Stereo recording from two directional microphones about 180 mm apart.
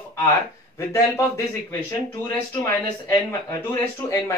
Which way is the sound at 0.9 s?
15° left (ahead or behind).